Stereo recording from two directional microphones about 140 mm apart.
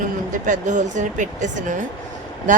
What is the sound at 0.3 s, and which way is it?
Speech, 65° right (ahead or behind).